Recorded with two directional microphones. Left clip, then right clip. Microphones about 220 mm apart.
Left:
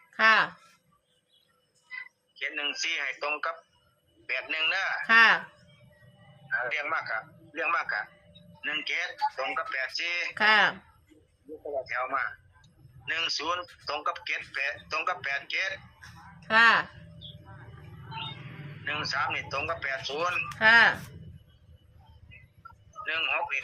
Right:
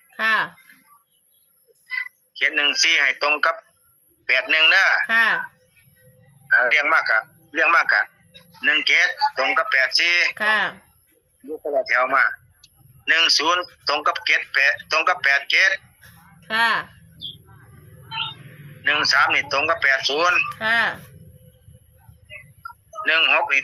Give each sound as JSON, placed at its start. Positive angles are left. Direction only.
{"t": 0.2, "sound": "a sound", "side_deg": -35}
{"t": 1.9, "sound": "a man's voice", "side_deg": -35}
{"t": 6.5, "sound": "a man's voice", "side_deg": -35}
{"t": 18.1, "sound": "a sound", "side_deg": -35}
{"t": 18.9, "sound": "a man's voice", "side_deg": -35}
{"t": 23.0, "sound": "a man's voice", "side_deg": -35}